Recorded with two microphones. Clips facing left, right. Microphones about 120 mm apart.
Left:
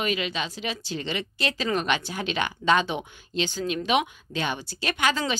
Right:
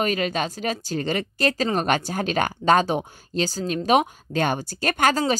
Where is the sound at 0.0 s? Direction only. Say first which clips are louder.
Right 5 dB; 45° right (ahead or behind).